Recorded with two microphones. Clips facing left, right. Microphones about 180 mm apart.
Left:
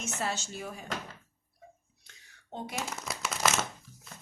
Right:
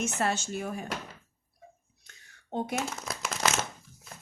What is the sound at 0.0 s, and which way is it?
Speech, 55° right (ahead or behind).